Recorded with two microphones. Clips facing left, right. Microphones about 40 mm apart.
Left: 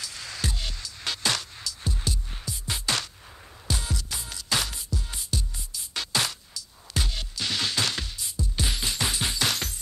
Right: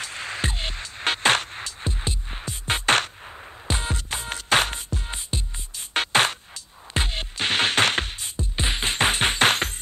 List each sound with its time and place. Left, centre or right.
0.0 s music: right